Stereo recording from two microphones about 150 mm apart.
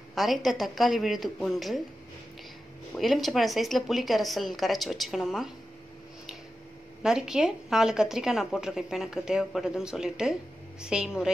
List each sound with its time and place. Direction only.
0.1 s a woman's voice: centre (ahead or behind)
2.9 s a woman's voice: centre (ahead or behind)
7.0 s a woman's voice: 5° right (ahead or behind)